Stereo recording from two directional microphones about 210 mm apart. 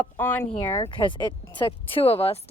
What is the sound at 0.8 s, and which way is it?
Speech, 25° left (ahead or behind).